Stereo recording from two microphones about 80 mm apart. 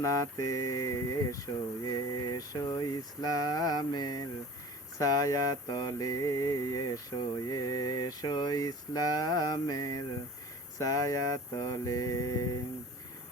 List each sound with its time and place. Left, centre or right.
0.0 s mantra: left